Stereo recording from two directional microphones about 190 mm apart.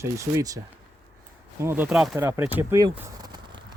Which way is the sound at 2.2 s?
15° right (ahead or behind).